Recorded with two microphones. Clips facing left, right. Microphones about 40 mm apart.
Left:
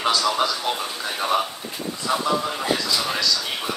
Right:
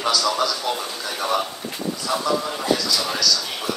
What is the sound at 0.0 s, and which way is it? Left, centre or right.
A man's voice, left.